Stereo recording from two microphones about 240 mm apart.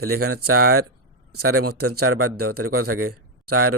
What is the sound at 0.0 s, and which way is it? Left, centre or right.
A man's voice, right.